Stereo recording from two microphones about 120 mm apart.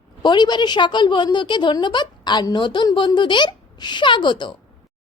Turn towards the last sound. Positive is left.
turn(degrees=40)  # may be behind; listen again after turning